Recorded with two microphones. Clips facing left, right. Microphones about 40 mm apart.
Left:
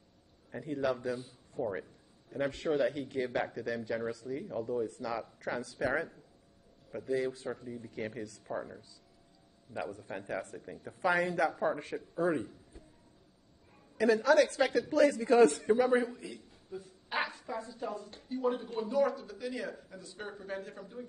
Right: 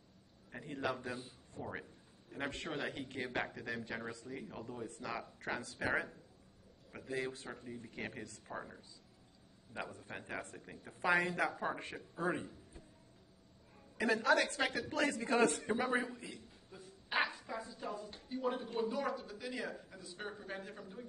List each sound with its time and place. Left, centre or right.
1.0 s a man's voice: right
1.6 s speech: centre
2.3 s a man's voice: right
8.5 s speech: centre
9.8 s a man's voice: right
10.6 s a man's voice: centre
10.9 s a man's voice: right
11.9 s speech: centre
12.3 s a man's voice: centre
13.9 s a man's voice: right
15.6 s a man's voice: centre
16.7 s a sound: centre
17.3 s speech: centre